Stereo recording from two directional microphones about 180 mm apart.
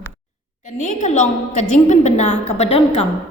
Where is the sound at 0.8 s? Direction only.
40° left (ahead or behind).